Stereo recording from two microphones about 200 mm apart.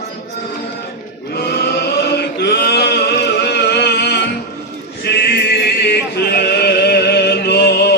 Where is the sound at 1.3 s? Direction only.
55° left (ahead or behind).